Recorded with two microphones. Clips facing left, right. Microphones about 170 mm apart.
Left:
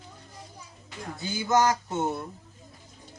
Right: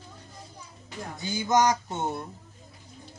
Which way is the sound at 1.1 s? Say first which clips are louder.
Even; 15° right (ahead or behind).